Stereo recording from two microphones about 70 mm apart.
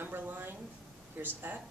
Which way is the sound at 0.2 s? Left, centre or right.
Right.